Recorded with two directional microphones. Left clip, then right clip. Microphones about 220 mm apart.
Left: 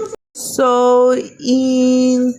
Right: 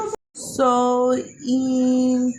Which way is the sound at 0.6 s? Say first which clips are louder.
Left 7 dB; 30° left (ahead or behind).